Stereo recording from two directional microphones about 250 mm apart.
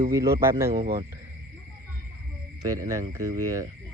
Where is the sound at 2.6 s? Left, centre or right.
Centre.